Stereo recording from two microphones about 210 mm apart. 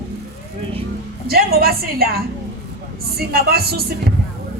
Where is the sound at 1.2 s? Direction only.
45° right (ahead or behind).